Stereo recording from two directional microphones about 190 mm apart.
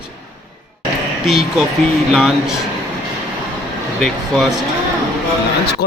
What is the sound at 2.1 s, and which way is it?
Speech, centre (ahead or behind).